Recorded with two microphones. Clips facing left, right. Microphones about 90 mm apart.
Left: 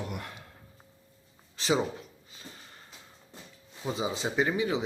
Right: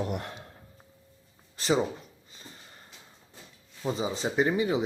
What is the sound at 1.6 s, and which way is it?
Speech, centre (ahead or behind).